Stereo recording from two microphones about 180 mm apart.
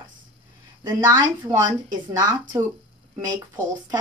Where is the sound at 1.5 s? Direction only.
20° right (ahead or behind).